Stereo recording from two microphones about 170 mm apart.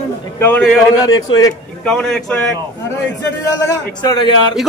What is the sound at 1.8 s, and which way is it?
Speech, 5° left (ahead or behind).